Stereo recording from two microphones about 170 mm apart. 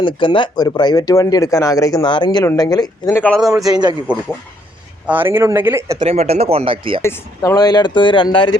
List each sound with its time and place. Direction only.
0.0 s speech: 30° left (ahead or behind)
4.1 s speech: 10° right (ahead or behind)
6.0 s speech: 40° right (ahead or behind)
7.0 s speech: 15° left (ahead or behind)